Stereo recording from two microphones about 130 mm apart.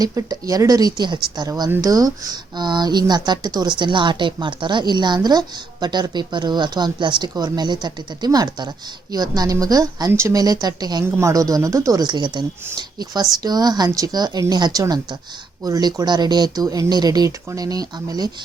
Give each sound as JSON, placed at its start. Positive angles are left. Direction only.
{"t": 0.0, "sound": "speech", "side_deg": -25}